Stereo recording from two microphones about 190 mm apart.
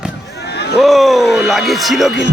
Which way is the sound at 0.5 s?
60° left (ahead or behind).